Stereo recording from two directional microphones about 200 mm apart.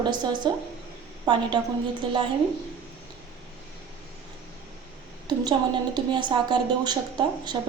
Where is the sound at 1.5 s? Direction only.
25° right (ahead or behind).